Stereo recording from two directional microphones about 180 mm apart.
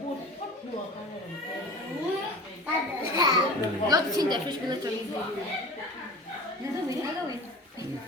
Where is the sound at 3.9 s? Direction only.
25° right (ahead or behind).